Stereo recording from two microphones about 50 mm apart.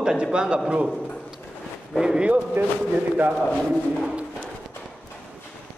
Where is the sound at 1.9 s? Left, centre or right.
Centre.